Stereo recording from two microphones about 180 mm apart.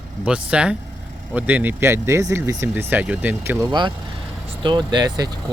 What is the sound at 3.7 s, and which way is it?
Speech, 25° right (ahead or behind).